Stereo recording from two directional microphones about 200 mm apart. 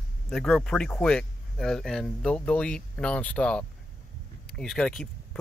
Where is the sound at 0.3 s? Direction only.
Centre (ahead or behind).